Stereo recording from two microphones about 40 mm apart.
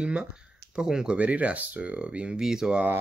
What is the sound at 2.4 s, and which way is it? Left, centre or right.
Speech, centre.